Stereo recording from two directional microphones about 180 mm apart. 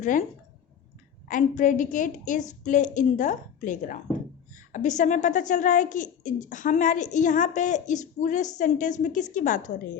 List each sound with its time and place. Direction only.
0.0 s a woman's voice: 45° left (ahead or behind)
1.3 s a woman's voice: 45° left (ahead or behind)